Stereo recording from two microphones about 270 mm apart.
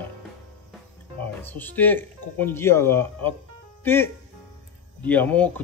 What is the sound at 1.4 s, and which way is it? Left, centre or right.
Speech, centre.